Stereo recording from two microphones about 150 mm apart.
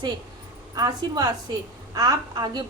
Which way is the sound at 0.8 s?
25° right (ahead or behind).